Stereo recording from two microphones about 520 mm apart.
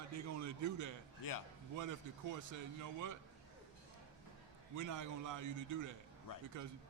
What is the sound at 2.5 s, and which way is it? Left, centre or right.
Speech, right.